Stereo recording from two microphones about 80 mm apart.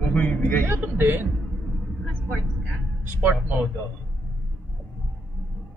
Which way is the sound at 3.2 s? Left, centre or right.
Right.